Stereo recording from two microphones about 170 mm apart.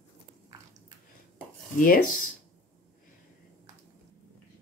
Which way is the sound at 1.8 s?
55° left (ahead or behind).